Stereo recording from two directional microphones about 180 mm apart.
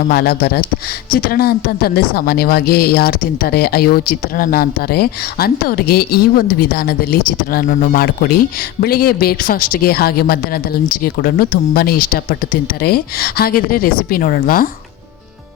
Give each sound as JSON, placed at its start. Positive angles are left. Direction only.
{"t": 0.1, "sound": "speech", "side_deg": 60}